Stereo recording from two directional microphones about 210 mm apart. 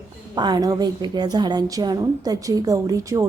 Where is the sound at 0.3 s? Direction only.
20° right (ahead or behind).